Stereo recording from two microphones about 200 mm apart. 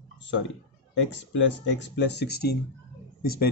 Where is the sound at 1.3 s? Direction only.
60° left (ahead or behind).